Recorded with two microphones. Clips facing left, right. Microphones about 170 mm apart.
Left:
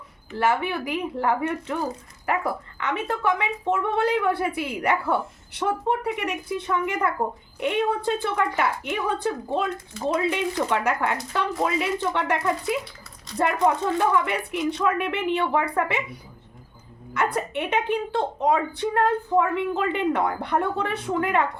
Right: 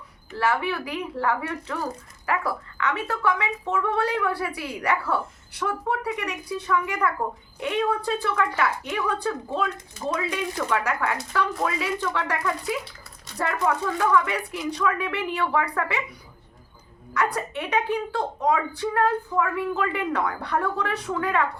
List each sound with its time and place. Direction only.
0.3 s speech: 20° left (ahead or behind)
17.2 s speech: 25° left (ahead or behind)